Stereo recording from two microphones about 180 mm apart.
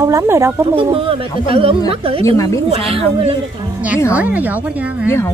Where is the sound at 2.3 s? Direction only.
15° left (ahead or behind).